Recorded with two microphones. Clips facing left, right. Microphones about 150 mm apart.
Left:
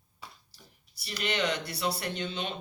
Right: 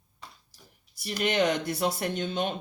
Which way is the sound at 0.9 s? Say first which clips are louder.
Right 6 dB; 50° right (ahead or behind).